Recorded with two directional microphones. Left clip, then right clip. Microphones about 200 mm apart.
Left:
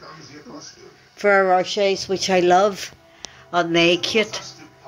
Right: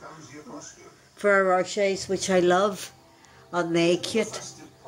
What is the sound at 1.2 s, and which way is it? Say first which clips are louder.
Speech: left 5 dB; 5° left (ahead or behind).